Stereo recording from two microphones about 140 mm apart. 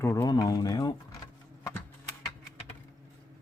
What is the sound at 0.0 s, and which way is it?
Speech, 20° left (ahead or behind).